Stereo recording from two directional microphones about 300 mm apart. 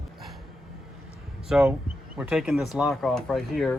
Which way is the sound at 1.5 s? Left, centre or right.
Centre.